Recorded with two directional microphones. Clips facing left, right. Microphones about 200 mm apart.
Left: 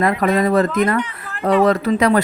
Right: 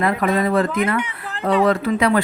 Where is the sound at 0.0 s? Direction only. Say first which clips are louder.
Left 2 dB; 40° left (ahead or behind).